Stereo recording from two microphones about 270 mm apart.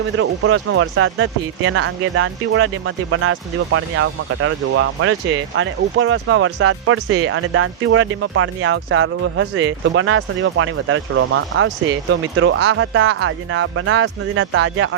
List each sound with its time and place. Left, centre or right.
0.2 s speech: right